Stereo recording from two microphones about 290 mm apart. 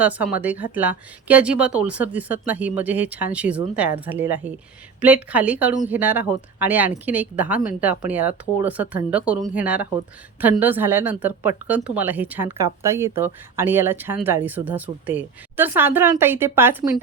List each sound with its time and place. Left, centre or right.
0.0 s a woman's voice: centre